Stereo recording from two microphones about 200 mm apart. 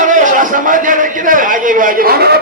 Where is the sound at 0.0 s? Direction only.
40° right (ahead or behind).